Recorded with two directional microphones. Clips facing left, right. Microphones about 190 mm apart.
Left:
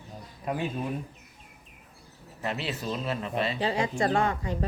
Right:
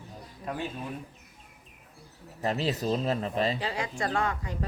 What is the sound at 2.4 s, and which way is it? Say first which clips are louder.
Speech: right 4 dB; 40° right (ahead or behind).